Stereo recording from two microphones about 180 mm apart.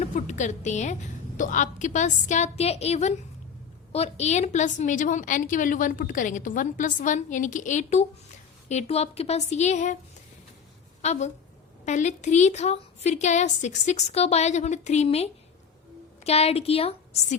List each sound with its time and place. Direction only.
0.0 s a woman's voice: 40° left (ahead or behind)
11.0 s a woman's voice: 40° left (ahead or behind)